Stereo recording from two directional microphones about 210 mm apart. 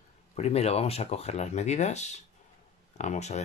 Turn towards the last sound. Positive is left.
turn(degrees=35)  # may be behind; listen again after turning